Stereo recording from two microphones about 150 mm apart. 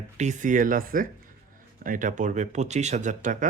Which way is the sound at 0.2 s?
55° right (ahead or behind).